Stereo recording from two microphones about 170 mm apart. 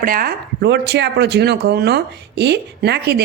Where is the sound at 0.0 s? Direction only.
55° right (ahead or behind).